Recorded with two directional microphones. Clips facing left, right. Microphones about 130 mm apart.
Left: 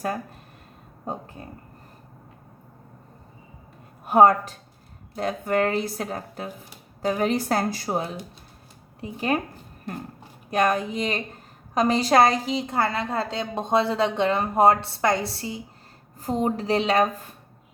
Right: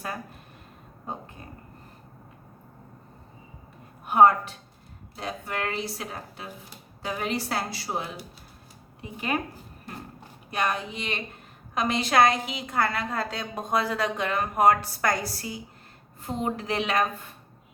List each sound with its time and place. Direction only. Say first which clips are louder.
4.0 s speech: left 2 dB; 40° left (ahead or behind)
10.5 s a woman's voice: left 6 dB; 45° left (ahead or behind)